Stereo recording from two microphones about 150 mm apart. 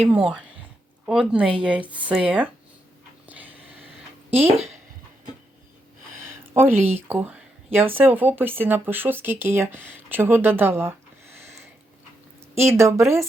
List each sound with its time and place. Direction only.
0.1 s speech: centre (ahead or behind)
3.2 s a sound: 10° right (ahead or behind)
4.4 s speech: 45° right (ahead or behind)
6.5 s speech: 15° right (ahead or behind)
12.5 s speech: 20° right (ahead or behind)